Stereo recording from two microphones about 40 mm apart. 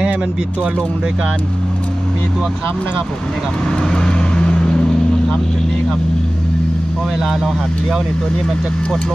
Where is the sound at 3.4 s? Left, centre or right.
Centre.